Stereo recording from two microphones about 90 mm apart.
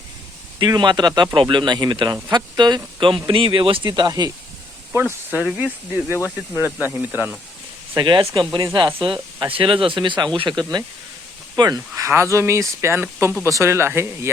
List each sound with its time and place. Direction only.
0.8 s speech: 55° right (ahead or behind); by 3.8 s 80° right
3.8 s speech: 50° right (ahead or behind)
4.9 s speech: 25° right (ahead or behind)
7.9 s speech: 60° right (ahead or behind)
12.0 s speech: 35° right (ahead or behind)